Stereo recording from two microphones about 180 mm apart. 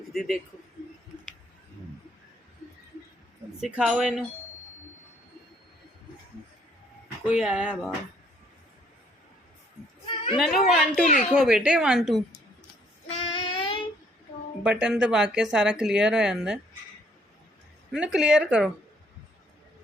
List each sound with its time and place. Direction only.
0.1 s a man's voice: centre (ahead or behind)
3.6 s speech: 5° right (ahead or behind)
7.3 s speech: 5° right (ahead or behind)
10.3 s speech: centre (ahead or behind)
11.0 s speech: 45° left (ahead or behind)
11.3 s speech: 5° right (ahead or behind)
13.1 s child singing: 30° left (ahead or behind)
14.6 s speech: 5° right (ahead or behind)
17.9 s speech: 5° right (ahead or behind)